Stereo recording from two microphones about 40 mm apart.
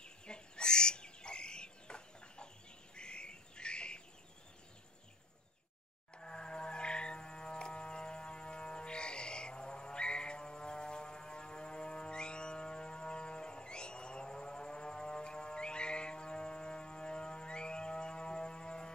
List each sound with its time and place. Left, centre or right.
0.0 s bird: left
6.1 s music: left